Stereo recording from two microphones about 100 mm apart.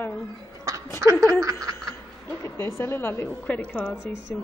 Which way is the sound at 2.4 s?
25° left (ahead or behind).